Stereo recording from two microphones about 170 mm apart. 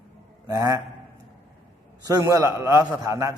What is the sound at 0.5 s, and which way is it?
Speech, 20° right (ahead or behind).